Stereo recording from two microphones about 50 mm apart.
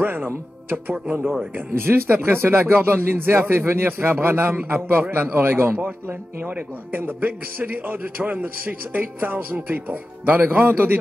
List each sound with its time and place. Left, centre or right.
0.0 s speech: right
1.7 s speech: right